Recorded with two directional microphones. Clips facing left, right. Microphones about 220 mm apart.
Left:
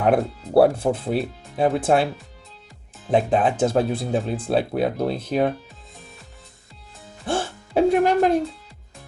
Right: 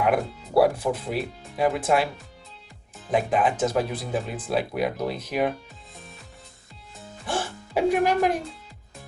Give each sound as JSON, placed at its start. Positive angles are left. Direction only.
{"t": 0.0, "sound": "speech", "side_deg": 30}
{"t": 3.1, "sound": "speech", "side_deg": 30}
{"t": 7.3, "sound": "speech", "side_deg": 25}